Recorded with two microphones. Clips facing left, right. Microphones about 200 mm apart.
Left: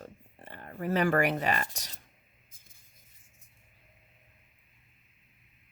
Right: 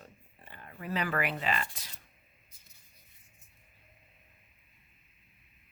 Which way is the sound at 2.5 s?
50° left (ahead or behind).